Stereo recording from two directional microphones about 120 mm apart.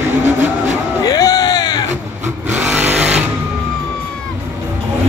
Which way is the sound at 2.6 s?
15° right (ahead or behind).